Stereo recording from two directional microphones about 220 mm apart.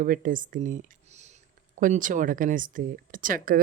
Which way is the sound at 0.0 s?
40° right (ahead or behind).